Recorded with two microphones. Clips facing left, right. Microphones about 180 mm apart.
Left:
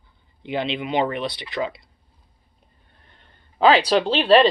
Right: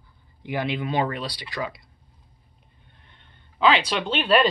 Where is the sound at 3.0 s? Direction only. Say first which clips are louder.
Left 2 dB; 40° left (ahead or behind).